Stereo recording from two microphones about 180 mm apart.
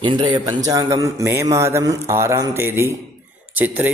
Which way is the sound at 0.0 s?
25° right (ahead or behind).